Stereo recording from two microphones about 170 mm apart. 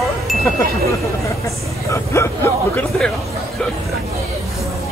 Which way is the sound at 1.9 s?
15° left (ahead or behind).